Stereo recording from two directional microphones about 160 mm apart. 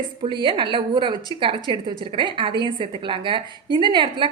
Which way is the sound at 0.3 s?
30° right (ahead or behind).